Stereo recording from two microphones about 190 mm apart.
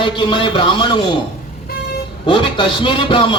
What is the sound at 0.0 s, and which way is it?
A man's voice, 25° left (ahead or behind).